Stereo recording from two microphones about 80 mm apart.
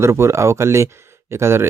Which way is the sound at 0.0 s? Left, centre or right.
Right.